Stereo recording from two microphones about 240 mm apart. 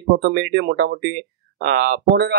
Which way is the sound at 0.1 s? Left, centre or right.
Right.